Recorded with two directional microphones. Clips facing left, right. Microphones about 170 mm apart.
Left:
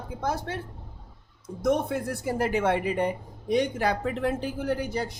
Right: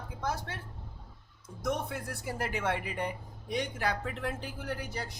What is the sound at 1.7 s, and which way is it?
Speech, 25° left (ahead or behind).